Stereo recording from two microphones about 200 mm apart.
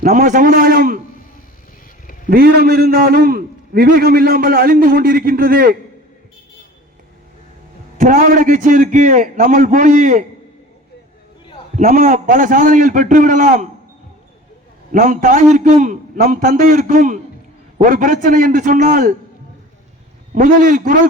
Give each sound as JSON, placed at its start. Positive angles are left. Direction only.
{"t": 0.0, "sound": "a man's voice", "side_deg": -40}
{"t": 2.3, "sound": "a man's voice", "side_deg": -50}
{"t": 7.9, "sound": "a man's voice", "side_deg": -40}
{"t": 11.8, "sound": "a man's voice", "side_deg": -40}
{"t": 14.9, "sound": "a man's voice", "side_deg": -40}
{"t": 20.3, "sound": "a man's voice", "side_deg": -40}